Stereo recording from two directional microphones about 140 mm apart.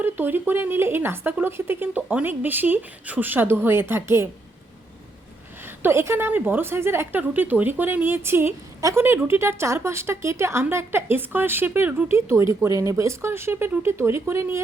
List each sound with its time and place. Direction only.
0.0 s a woman's voice: 15° right (ahead or behind)
5.6 s a woman's voice: 15° right (ahead or behind)